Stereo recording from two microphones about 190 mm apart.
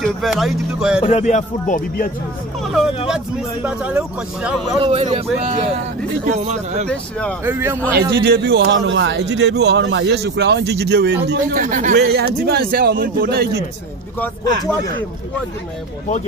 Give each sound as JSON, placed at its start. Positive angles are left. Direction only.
{"t": 0.0, "sound": "speech", "side_deg": 0}
{"t": 1.0, "sound": "speech", "side_deg": 40}
{"t": 2.6, "sound": "speech", "side_deg": 0}
{"t": 4.7, "sound": "a man's voice", "side_deg": -30}
{"t": 6.9, "sound": "speech", "side_deg": 5}
{"t": 7.4, "sound": "speech", "side_deg": -10}
{"t": 8.1, "sound": "speech", "side_deg": -60}
{"t": 11.6, "sound": "speech", "side_deg": -45}
{"t": 12.0, "sound": "speech", "side_deg": -55}